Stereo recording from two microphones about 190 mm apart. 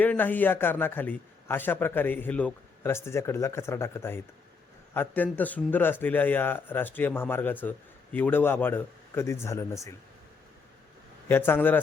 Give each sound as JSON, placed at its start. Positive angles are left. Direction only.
{"t": 0.0, "sound": "speech", "side_deg": 10}
{"t": 11.3, "sound": "speech", "side_deg": 10}